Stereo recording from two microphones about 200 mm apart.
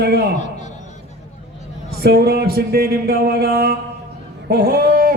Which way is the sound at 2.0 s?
50° right (ahead or behind).